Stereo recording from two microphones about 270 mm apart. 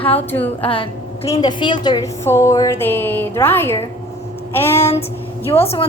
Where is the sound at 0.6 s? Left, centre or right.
Left.